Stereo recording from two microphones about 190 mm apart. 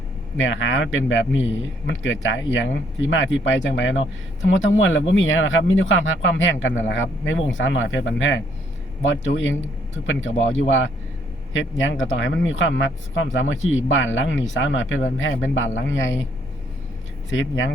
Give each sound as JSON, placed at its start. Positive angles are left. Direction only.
{"t": 0.3, "sound": "speech", "side_deg": 90}
{"t": 4.4, "sound": "speech", "side_deg": 90}
{"t": 17.3, "sound": "speech", "side_deg": 80}